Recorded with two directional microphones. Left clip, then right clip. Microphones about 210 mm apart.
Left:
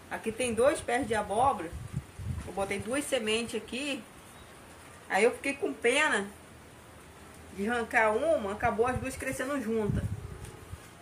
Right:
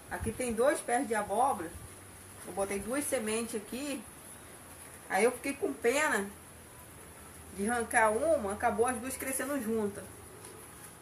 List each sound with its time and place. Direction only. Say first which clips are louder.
0.1 s speech: left 3 dB; 20° left (ahead or behind)
2.5 s speech: left 2 dB; 5° left (ahead or behind)
5.1 s a woman's voice: left 3 dB; 5° left (ahead or behind)
7.6 s a woman's voice: left 1 dB; centre (ahead or behind)